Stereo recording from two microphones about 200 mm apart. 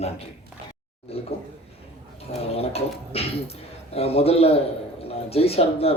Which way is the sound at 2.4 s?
30° left (ahead or behind).